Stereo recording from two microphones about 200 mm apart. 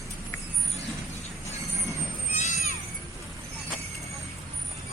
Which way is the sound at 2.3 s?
35° left (ahead or behind).